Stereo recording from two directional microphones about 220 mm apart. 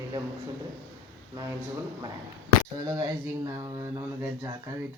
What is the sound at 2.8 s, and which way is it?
Speech, 15° right (ahead or behind).